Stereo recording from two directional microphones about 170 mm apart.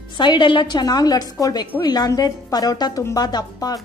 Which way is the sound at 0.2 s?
30° left (ahead or behind).